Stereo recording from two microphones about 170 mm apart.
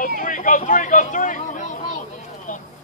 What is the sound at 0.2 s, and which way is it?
Speech, 50° left (ahead or behind).